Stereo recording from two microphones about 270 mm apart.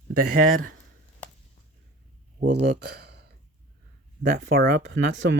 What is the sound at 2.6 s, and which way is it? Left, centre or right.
Speech, right.